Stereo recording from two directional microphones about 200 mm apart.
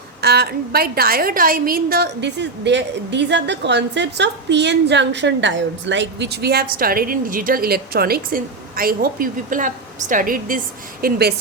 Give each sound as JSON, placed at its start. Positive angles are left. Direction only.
{"t": 0.2, "sound": "a woman's voice", "side_deg": -55}